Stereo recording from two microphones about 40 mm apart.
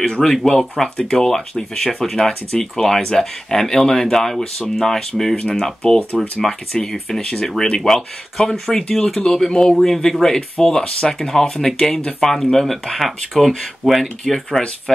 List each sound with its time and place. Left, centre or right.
0.0 s speech: centre
7.6 s speech: left
7.9 s speech: centre